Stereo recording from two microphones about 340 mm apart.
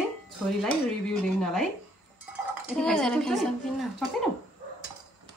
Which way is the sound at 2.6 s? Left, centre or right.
Centre.